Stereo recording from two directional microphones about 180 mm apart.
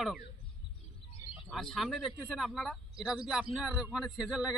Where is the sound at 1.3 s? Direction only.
Centre (ahead or behind).